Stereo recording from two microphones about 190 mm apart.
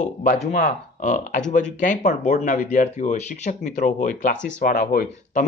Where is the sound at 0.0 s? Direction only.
45° left (ahead or behind).